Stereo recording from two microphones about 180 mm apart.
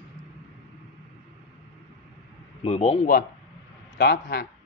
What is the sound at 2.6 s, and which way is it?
Speech, 35° left (ahead or behind).